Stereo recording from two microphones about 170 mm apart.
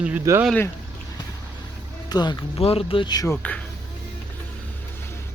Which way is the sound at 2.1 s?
25° left (ahead or behind).